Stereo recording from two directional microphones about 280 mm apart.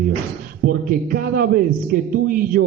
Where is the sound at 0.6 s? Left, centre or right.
Right.